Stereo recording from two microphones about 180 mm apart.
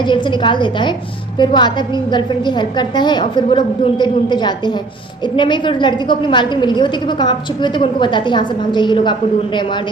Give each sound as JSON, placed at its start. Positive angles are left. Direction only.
{"t": 0.0, "sound": "a woman's voice", "side_deg": 25}